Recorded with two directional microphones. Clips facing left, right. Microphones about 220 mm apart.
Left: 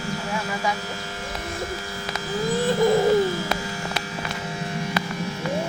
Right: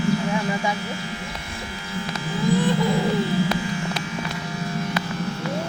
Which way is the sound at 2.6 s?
40° left (ahead or behind).